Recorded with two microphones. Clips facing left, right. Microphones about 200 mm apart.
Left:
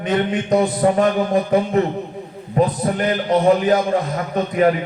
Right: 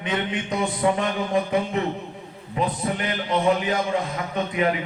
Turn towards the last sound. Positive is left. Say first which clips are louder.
# left 7 dB
turn(degrees=45)  # may be behind; listen again after turning